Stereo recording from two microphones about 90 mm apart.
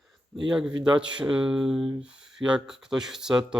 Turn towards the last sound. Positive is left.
turn(degrees=-5)  # may be behind; listen again after turning